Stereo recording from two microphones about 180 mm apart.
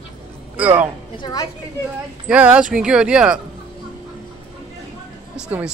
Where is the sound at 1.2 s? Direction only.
20° left (ahead or behind).